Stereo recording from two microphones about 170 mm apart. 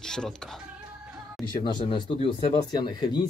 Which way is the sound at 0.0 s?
5° left (ahead or behind).